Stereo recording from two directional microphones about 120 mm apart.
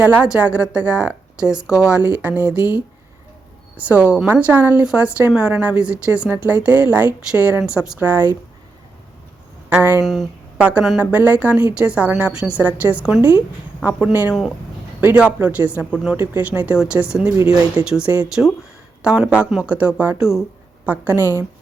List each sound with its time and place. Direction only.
0.0 s a woman's voice: 10° right (ahead or behind)
9.6 s speech: 15° right (ahead or behind)
10.0 s speech: centre (ahead or behind)
10.6 s a woman's voice: 10° right (ahead or behind)